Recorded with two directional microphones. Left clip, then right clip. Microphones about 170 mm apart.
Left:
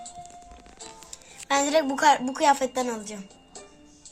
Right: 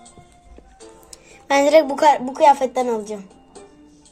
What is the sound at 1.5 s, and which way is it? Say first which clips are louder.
A woman's voice: right 9 dB; 40° right (ahead or behind).